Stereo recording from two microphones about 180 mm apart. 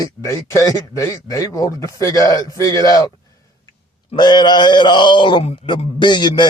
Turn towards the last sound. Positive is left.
turn(degrees=25)  # may be behind; listen again after turning